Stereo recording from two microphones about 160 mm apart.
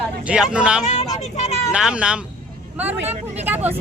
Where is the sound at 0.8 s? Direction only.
45° left (ahead or behind).